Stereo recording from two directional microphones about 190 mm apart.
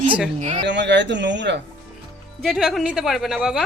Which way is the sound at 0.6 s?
65° right (ahead or behind).